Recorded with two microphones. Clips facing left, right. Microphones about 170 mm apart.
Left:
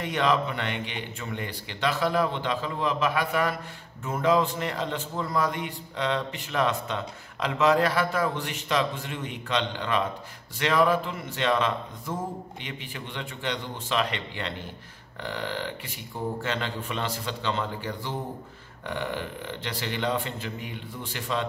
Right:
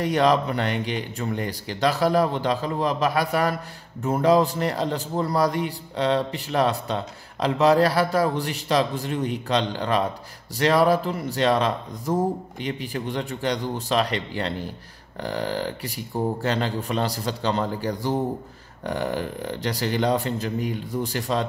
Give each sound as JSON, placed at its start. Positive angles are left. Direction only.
{"t": 0.0, "sound": "a man's voice", "side_deg": -40}